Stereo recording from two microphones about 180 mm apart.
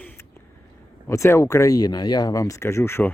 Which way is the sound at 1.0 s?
15° left (ahead or behind).